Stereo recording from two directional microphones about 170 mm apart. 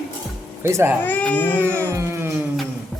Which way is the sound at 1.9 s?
15° right (ahead or behind).